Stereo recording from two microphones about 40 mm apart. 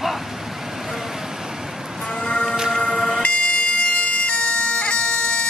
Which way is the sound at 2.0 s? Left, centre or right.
Centre.